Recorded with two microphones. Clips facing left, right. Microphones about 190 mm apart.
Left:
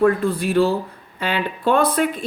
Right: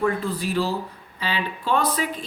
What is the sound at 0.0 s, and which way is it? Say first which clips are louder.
Speech: left 6 dB; 55° left (ahead or behind).